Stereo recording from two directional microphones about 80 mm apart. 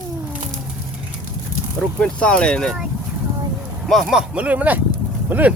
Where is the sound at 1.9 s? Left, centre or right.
Centre.